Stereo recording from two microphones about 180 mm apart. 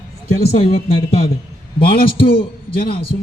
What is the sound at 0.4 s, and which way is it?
Speech, 35° left (ahead or behind).